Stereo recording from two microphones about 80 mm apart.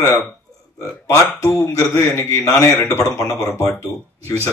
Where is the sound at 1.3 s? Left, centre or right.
Left.